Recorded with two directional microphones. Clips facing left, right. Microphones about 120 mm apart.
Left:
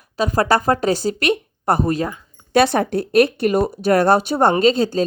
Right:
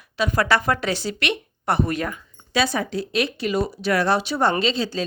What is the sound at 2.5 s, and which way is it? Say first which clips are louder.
A woman's voice: left 7 dB; 60° left (ahead or behind).